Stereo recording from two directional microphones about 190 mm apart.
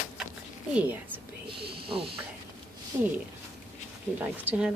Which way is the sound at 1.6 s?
55° right (ahead or behind).